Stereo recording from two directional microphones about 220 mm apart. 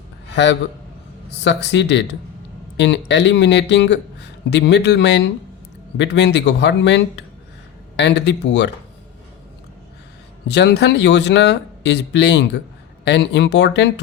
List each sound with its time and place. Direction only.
1.4 s speech: 55° left (ahead or behind)
10.5 s speech: 50° left (ahead or behind)